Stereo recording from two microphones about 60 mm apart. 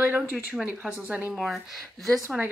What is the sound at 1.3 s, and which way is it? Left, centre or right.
Speech, centre.